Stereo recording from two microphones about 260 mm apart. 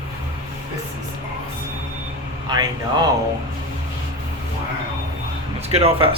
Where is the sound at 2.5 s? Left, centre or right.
Centre.